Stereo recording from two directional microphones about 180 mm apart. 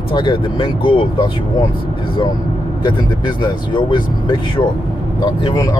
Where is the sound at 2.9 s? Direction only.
25° left (ahead or behind).